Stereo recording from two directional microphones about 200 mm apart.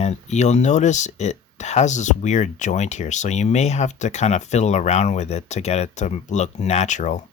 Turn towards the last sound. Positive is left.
turn(degrees=35)  # may be behind; listen again after turning